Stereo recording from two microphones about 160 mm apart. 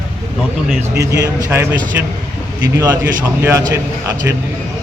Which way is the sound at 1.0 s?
20° right (ahead or behind).